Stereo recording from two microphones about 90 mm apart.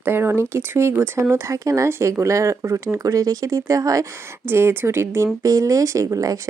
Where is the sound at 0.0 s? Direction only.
25° right (ahead or behind); by 4.0 s 40° right (ahead or behind).